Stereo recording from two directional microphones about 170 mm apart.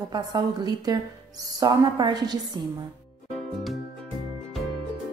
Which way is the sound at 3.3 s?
Centre (ahead or behind).